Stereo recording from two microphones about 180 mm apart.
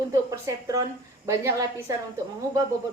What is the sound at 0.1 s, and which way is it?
A woman's voice, 20° right (ahead or behind).